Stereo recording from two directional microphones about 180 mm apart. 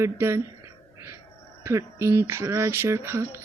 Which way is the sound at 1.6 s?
15° right (ahead or behind).